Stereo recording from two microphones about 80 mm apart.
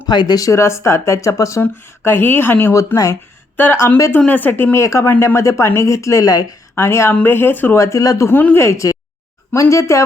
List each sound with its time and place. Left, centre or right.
0.1 s speech: left
2.0 s speech: left
2.7 s speech: left
3.6 s speech: left
4.3 s speech: left
6.7 s speech: left
7.1 s speech: left
7.8 s speech: left